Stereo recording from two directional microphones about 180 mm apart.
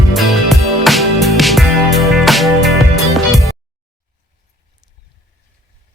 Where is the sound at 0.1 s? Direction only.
Centre (ahead or behind).